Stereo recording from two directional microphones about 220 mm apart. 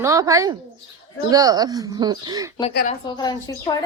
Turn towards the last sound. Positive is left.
turn(degrees=15)  # may be behind; listen again after turning